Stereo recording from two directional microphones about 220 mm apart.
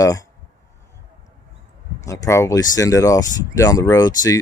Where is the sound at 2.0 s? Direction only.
15° left (ahead or behind).